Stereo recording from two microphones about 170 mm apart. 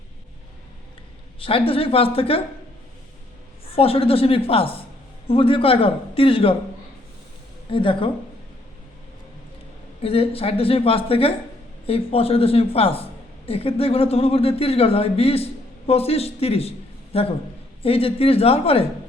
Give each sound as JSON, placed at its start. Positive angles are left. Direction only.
{"t": 1.4, "sound": "speech", "side_deg": 30}
{"t": 3.8, "sound": "speech", "side_deg": 35}
{"t": 7.7, "sound": "speech", "side_deg": 30}
{"t": 10.0, "sound": "a man's voice", "side_deg": 35}